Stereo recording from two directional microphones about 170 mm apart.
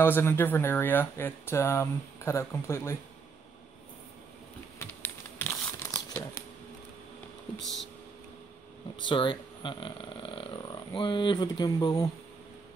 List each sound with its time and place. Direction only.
0.0 s speech: 15° left (ahead or behind)
4.7 s crumpling: 15° left (ahead or behind)
9.1 s speech: 30° left (ahead or behind)